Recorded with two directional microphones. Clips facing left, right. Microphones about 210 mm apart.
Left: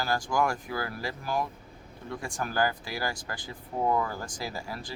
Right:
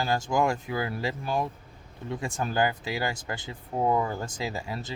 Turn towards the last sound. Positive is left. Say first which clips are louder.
# right 3 dB
turn(degrees=-20)  # may be behind; listen again after turning